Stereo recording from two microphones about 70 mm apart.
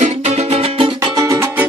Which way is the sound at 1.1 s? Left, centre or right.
Right.